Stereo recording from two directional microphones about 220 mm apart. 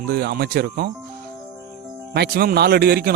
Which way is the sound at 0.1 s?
45° right (ahead or behind).